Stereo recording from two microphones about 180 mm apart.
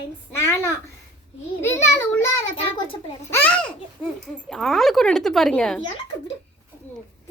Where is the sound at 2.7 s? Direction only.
30° left (ahead or behind).